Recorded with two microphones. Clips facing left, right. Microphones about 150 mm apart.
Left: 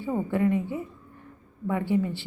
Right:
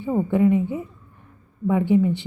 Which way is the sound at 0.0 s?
20° right (ahead or behind).